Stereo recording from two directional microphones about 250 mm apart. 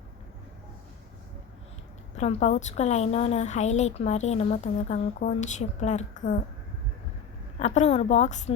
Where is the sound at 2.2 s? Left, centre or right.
Left.